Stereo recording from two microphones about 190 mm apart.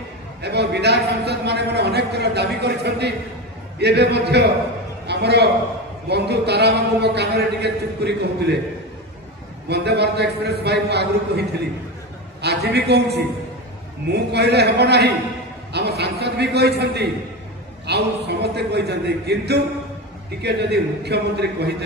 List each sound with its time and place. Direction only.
0.4 s a man's voice: 60° right (ahead or behind)
9.7 s a man's voice: 60° right (ahead or behind)